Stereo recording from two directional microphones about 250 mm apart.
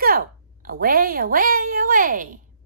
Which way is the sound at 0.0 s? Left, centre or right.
Right.